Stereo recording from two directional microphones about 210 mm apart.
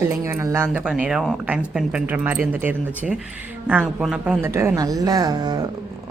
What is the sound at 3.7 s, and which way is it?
Speech, 5° right (ahead or behind).